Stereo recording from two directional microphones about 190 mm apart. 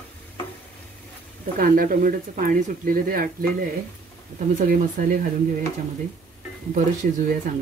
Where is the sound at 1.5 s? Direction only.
50° right (ahead or behind).